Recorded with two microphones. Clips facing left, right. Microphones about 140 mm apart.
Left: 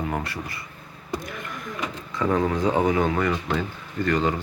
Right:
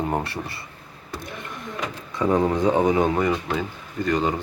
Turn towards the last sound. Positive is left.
turn(degrees=-15)  # may be behind; listen again after turning